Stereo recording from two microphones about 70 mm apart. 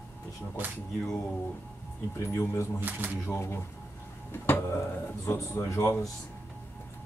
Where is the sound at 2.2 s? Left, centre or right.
Left.